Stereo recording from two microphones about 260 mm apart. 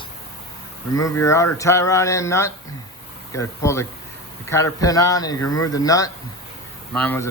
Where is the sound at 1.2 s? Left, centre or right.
Centre.